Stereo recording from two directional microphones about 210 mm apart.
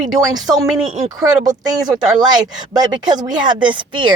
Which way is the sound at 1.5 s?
20° right (ahead or behind).